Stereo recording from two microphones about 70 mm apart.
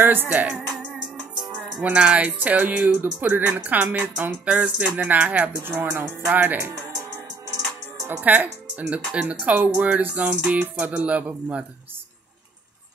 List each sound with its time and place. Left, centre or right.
0.0 s speech: right
0.5 s music: centre
1.8 s speech: centre
8.2 s speech: right